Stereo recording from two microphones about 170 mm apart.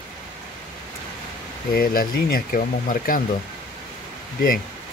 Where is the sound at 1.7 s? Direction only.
60° left (ahead or behind).